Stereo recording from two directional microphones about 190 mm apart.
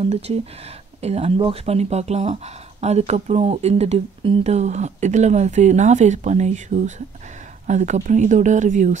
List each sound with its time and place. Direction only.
0.0 s speech: 35° right (ahead or behind)